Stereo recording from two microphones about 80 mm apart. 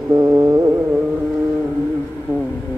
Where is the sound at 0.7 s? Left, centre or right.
Right.